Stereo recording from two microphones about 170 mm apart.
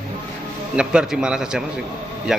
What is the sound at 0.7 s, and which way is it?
Speech, 5° right (ahead or behind).